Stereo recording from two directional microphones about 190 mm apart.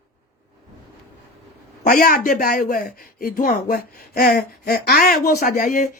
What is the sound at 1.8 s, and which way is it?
Speech, 45° left (ahead or behind).